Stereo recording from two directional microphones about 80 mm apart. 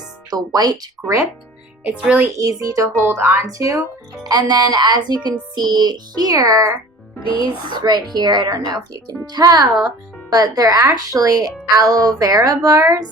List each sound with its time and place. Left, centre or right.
0.3 s speech: right
1.8 s a child's voice: centre
2.3 s speech: right
3.1 s speech: right
7.3 s a child's voice: left
7.7 s speech: right